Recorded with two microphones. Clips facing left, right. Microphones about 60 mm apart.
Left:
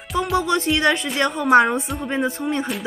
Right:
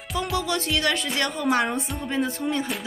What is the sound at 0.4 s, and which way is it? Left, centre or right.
Music, left.